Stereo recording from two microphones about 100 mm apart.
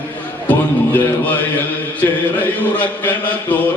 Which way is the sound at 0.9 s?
15° left (ahead or behind).